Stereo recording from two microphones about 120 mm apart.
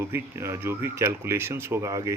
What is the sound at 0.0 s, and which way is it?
Speech, 20° right (ahead or behind).